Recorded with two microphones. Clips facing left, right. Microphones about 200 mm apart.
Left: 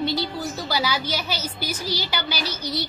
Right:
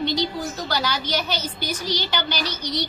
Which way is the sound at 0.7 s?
5° left (ahead or behind).